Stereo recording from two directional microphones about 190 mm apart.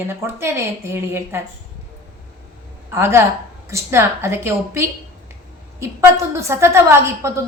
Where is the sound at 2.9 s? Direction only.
15° right (ahead or behind).